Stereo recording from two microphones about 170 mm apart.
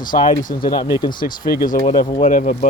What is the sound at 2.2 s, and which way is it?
Speech, 50° left (ahead or behind).